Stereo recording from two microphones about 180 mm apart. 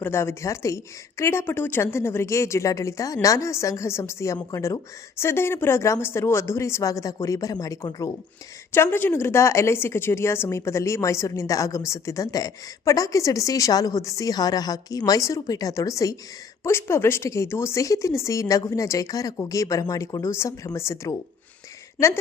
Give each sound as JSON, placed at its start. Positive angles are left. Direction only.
{"t": 0.0, "sound": "a woman's voice", "side_deg": 15}